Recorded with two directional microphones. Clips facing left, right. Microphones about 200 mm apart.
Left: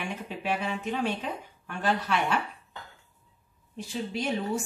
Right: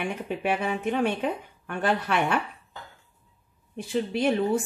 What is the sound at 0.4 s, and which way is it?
A woman's voice, 55° right (ahead or behind).